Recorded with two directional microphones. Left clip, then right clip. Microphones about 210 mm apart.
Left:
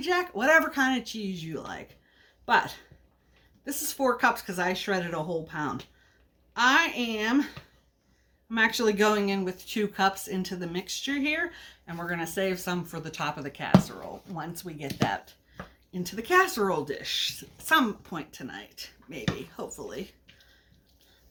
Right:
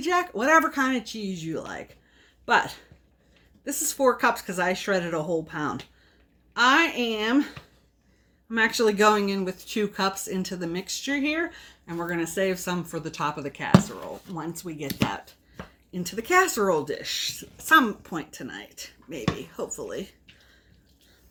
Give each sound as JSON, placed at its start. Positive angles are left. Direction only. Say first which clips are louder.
{"t": 0.0, "sound": "speech", "louder": "right 2 dB", "side_deg": 15}
{"t": 15.9, "sound": "speech", "louder": "right 2 dB", "side_deg": 15}